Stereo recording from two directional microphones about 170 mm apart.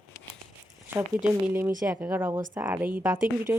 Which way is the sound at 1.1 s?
10° right (ahead or behind).